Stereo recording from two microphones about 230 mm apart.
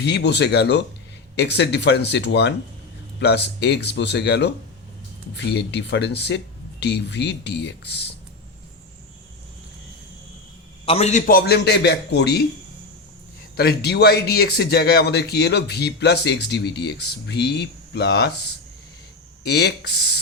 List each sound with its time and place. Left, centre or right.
0.0 s speech: left
10.8 s speech: left
13.6 s speech: left